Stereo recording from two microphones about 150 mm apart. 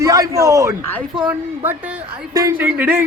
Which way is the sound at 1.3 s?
10° right (ahead or behind).